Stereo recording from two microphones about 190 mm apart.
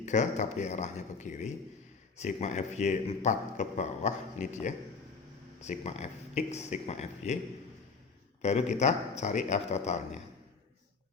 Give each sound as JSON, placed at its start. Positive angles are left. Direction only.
{"t": 0.0, "sound": "a man's voice", "side_deg": 40}
{"t": 8.4, "sound": "a man's voice", "side_deg": 35}